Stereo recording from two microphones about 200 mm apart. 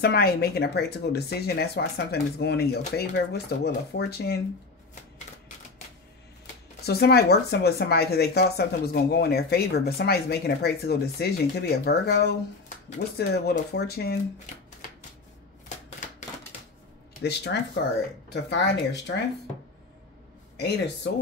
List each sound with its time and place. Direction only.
0.0 s speech: 50° left (ahead or behind)
6.8 s speech: 55° left (ahead or behind)
17.2 s speech: 55° left (ahead or behind)
20.5 s speech: 55° left (ahead or behind)